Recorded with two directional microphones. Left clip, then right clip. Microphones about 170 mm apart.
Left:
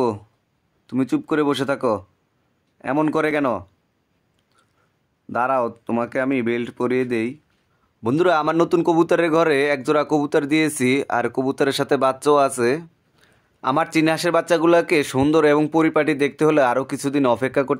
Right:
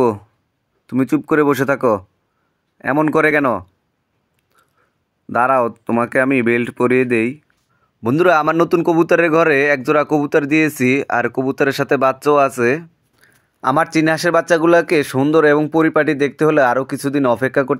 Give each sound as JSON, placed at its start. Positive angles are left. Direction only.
{"t": 0.8, "sound": "speech", "side_deg": -25}
{"t": 5.3, "sound": "a man's voice", "side_deg": -20}